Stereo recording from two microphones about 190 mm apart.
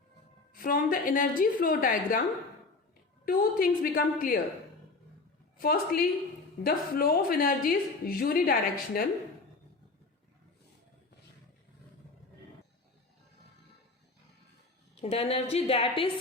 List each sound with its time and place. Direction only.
0.5 s a woman's voice: 50° left (ahead or behind)
3.2 s a woman's voice: 50° left (ahead or behind)
5.5 s a woman's voice: 50° left (ahead or behind)
15.0 s a woman's voice: 30° left (ahead or behind)